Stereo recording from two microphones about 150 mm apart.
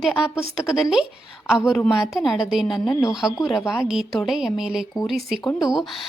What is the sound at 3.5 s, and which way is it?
A woman's voice, centre (ahead or behind).